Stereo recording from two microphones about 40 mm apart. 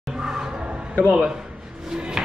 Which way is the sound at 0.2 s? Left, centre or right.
Centre.